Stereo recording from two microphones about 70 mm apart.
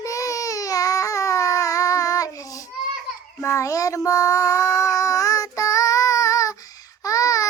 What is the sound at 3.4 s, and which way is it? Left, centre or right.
Child singing, left.